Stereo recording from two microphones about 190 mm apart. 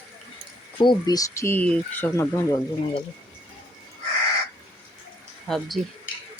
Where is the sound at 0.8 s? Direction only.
20° left (ahead or behind).